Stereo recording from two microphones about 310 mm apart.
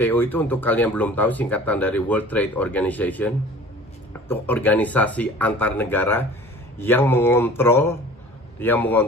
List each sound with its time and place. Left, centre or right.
0.0 s speech: centre